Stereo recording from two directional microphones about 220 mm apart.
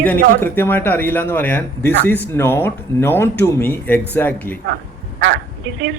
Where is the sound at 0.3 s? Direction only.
10° left (ahead or behind).